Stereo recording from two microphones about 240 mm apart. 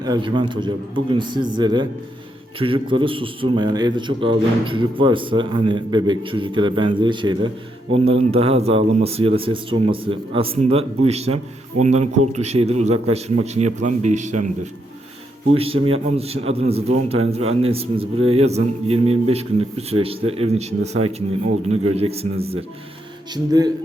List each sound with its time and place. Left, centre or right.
0.0 s a man's voice: centre
15.5 s a man's voice: right